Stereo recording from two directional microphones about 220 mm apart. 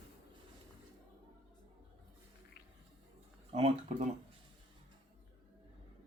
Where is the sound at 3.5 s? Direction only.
30° right (ahead or behind).